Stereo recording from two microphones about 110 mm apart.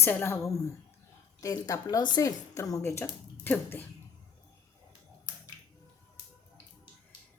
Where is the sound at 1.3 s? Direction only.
35° left (ahead or behind); by 3.8 s 20° left (ahead or behind).